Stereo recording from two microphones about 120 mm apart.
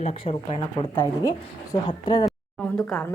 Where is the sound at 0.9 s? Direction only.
30° left (ahead or behind).